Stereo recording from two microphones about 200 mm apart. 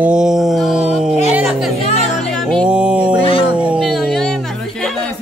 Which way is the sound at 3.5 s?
5° right (ahead or behind).